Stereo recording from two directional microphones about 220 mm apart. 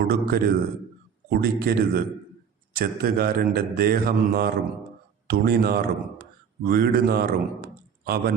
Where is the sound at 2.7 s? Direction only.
45° right (ahead or behind).